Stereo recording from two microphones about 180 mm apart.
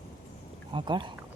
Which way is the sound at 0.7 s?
25° right (ahead or behind).